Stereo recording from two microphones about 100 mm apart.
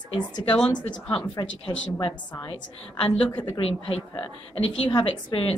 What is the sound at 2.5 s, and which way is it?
Speech, 60° left (ahead or behind).